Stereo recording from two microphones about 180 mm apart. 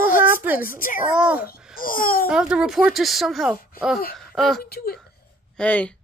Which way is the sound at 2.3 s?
5° right (ahead or behind).